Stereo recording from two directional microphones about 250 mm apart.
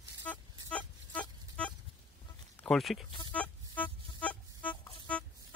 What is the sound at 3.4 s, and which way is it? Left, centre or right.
Music, centre.